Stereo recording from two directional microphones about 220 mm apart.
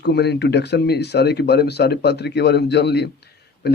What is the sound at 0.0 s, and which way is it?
A man's voice, 50° left (ahead or behind).